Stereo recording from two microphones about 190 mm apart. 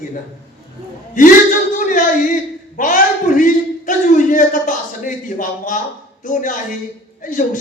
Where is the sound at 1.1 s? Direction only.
45° left (ahead or behind).